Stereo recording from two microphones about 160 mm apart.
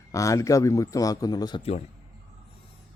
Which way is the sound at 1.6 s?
40° left (ahead or behind).